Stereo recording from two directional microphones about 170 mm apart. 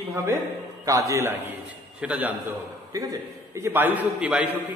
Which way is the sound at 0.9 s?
20° right (ahead or behind).